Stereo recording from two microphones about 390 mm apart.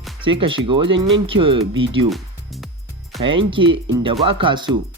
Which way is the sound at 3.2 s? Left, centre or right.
Centre.